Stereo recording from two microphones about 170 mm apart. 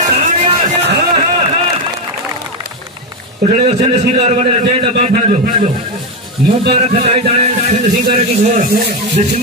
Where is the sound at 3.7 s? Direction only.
40° right (ahead or behind).